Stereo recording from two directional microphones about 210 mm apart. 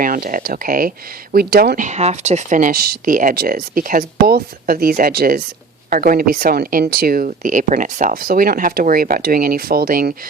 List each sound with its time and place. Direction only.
0.0 s speech: 40° right (ahead or behind)